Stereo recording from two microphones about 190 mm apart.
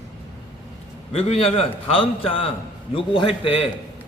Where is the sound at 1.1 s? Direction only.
35° left (ahead or behind).